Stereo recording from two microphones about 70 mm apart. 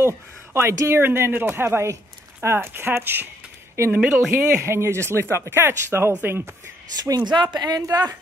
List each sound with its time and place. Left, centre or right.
0.0 s speech: right
4.6 s speech: right
7.0 s speech: right
7.8 s speech: right